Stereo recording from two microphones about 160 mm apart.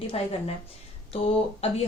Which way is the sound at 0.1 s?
35° left (ahead or behind).